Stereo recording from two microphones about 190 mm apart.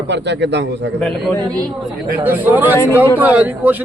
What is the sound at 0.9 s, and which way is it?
Speech, 5° left (ahead or behind).